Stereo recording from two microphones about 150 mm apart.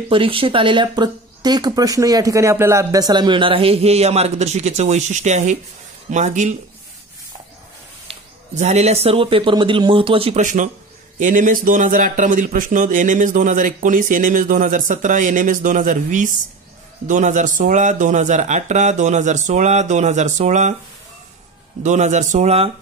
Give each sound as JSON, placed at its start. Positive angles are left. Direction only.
{"t": 0.1, "sound": "speech", "side_deg": -35}
{"t": 8.1, "sound": "speech", "side_deg": -50}
{"t": 10.4, "sound": "speech", "side_deg": -60}
{"t": 21.8, "sound": "speech", "side_deg": -50}